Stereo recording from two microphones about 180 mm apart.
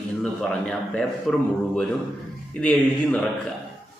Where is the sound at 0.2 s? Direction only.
5° left (ahead or behind).